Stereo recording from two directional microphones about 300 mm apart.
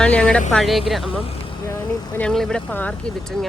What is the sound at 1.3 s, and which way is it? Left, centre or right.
Vehicle, centre.